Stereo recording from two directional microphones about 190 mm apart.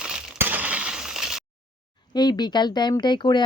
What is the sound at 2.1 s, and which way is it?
Speech, 20° left (ahead or behind).